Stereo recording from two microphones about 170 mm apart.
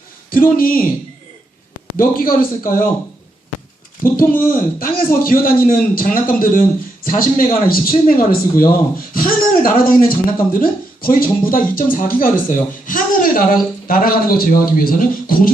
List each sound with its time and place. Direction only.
0.3 s a man's voice: 55° left (ahead or behind)
2.0 s a man's voice: 55° left (ahead or behind)
4.0 s a man's voice: 55° left (ahead or behind)